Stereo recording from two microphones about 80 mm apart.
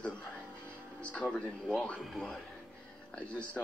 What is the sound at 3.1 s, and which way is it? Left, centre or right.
Speech, centre.